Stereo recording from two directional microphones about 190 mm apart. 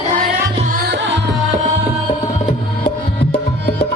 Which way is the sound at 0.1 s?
45° right (ahead or behind).